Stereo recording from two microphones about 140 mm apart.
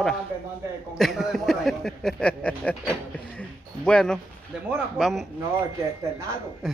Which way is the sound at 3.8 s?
5° left (ahead or behind).